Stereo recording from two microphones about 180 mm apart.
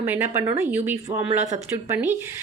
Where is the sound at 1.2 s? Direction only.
40° right (ahead or behind).